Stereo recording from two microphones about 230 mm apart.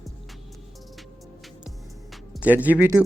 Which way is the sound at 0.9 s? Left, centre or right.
Centre.